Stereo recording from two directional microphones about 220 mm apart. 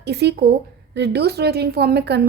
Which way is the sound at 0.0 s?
50° right (ahead or behind).